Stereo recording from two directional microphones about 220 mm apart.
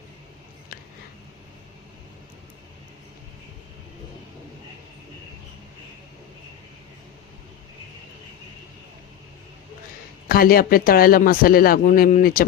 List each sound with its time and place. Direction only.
10.2 s speech: 40° left (ahead or behind)